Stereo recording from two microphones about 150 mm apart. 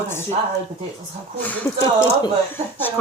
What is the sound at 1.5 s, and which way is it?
Speech, 10° left (ahead or behind).